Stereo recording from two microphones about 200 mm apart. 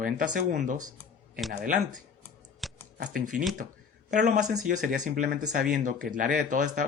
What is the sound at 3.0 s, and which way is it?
Speech, 40° right (ahead or behind).